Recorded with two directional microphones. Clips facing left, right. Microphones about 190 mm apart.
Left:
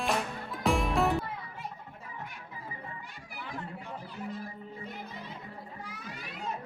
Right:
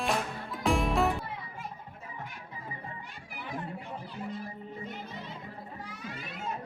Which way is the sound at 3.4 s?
20° right (ahead or behind).